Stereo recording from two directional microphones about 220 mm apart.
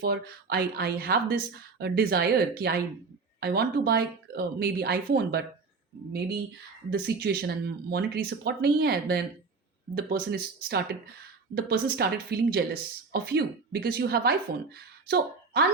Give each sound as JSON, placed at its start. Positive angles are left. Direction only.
{"t": 0.0, "sound": "speech", "side_deg": -45}
{"t": 6.9, "sound": "speech", "side_deg": -45}